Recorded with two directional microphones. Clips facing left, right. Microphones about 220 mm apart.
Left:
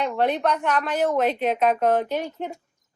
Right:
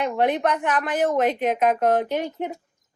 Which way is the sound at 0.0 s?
15° right (ahead or behind).